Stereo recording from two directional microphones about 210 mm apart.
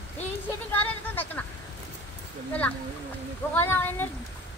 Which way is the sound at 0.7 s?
10° left (ahead or behind).